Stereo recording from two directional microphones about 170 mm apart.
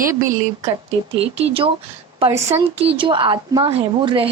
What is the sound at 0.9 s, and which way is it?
Speech, 35° right (ahead or behind).